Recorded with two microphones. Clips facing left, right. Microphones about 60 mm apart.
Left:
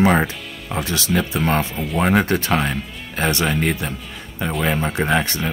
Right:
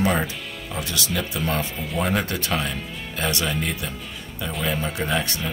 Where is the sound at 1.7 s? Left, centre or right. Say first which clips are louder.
Left 5 dB; centre.